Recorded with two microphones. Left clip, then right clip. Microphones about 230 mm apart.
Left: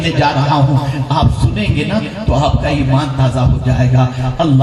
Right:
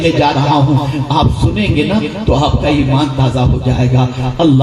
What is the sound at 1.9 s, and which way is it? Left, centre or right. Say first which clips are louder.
Speech: right 3 dB; right.